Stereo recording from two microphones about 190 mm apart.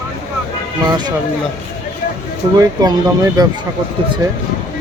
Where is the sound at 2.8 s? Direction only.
20° right (ahead or behind).